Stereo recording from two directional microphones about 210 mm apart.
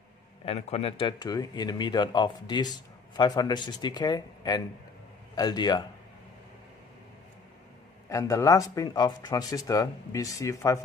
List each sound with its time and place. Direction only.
0.5 s speech: 30° left (ahead or behind)
8.1 s speech: 15° left (ahead or behind)